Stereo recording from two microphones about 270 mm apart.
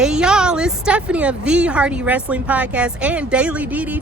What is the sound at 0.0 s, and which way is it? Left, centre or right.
A woman's voice, centre.